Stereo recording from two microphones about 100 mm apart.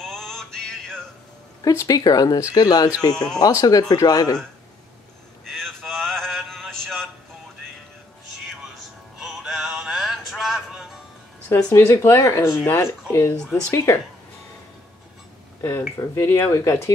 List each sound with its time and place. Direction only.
0.0 s music: 5° left (ahead or behind)
1.6 s speech: 35° left (ahead or behind)
5.5 s a sound: 5° left (ahead or behind)
8.5 s music: centre (ahead or behind)
11.4 s speech: 25° left (ahead or behind)
16.0 s speech: 30° left (ahead or behind)